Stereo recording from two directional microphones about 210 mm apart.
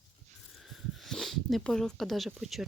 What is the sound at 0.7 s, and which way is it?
Speech, centre (ahead or behind).